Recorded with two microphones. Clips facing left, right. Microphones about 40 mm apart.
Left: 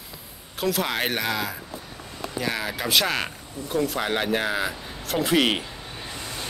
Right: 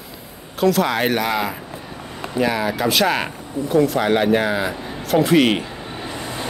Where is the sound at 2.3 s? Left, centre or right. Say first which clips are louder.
Right 8 dB; centre.